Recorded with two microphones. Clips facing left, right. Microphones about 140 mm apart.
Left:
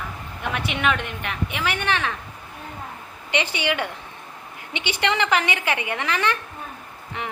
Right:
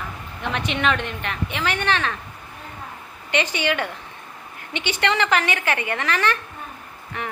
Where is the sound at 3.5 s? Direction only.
15° left (ahead or behind).